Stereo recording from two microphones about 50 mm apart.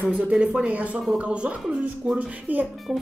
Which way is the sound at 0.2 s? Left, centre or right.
Right.